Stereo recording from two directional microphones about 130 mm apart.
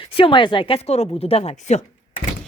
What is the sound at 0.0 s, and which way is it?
Speech, 40° left (ahead or behind).